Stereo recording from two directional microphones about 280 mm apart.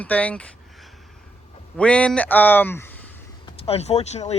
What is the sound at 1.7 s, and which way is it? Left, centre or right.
A man's voice, centre.